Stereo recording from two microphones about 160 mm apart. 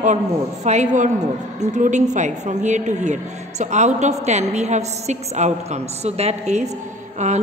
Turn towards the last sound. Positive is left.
turn(degrees=-45)  # may be behind; listen again after turning